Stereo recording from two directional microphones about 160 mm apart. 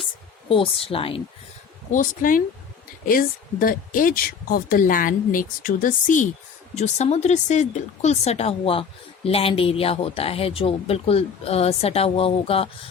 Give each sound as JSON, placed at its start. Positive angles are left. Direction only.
{"t": 0.4, "sound": "speech", "side_deg": 35}
{"t": 1.9, "sound": "speech", "side_deg": 55}